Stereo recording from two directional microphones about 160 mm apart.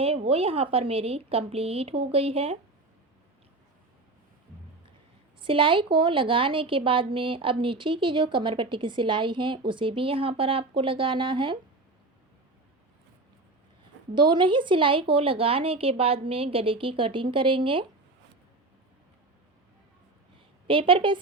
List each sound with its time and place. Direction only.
0.0 s a woman's voice: 35° right (ahead or behind)
5.4 s a woman's voice: 30° right (ahead or behind)
14.2 s a woman's voice: 30° right (ahead or behind)
20.7 s a woman's voice: 35° right (ahead or behind)